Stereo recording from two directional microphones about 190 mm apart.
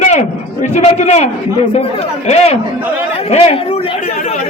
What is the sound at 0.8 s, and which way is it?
A man's voice, 35° left (ahead or behind).